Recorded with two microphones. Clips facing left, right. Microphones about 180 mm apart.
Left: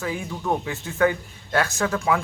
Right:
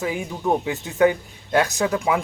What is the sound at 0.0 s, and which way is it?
A man's voice, 20° right (ahead or behind).